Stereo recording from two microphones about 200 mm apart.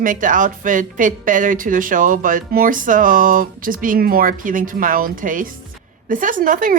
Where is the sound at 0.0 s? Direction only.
40° right (ahead or behind).